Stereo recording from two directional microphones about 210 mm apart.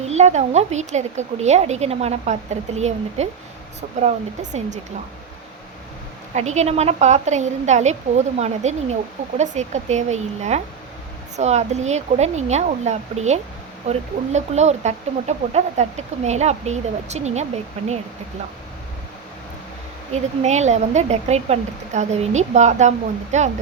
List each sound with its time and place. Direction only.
0.1 s speech: 30° right (ahead or behind)
6.3 s speech: 35° right (ahead or behind)
20.1 s speech: 30° right (ahead or behind)